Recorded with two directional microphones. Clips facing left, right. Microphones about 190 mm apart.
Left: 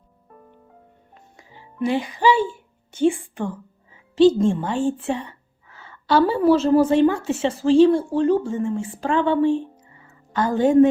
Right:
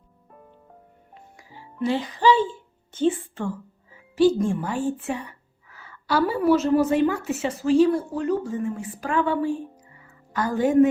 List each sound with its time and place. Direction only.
1.4 s a woman's voice: 20° left (ahead or behind)